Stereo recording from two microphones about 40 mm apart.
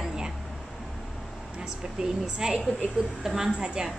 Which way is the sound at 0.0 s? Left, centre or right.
Centre.